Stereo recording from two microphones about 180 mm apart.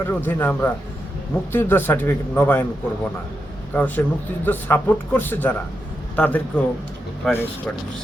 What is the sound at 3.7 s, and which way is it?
Speech, 10° left (ahead or behind).